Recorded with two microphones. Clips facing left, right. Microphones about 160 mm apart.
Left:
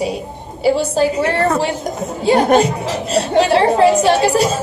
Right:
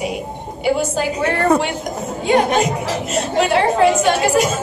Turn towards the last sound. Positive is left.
turn(degrees=30)  # may be behind; listen again after turning